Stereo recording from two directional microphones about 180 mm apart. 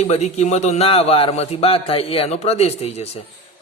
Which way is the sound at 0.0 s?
35° left (ahead or behind).